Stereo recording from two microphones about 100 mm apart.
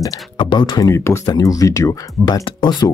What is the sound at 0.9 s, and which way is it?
Speech, 30° left (ahead or behind).